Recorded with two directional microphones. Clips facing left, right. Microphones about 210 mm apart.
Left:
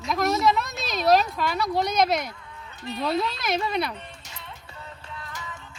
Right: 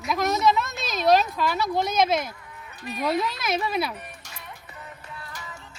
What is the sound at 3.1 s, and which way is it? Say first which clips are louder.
Speech: right 1 dB; centre (ahead or behind).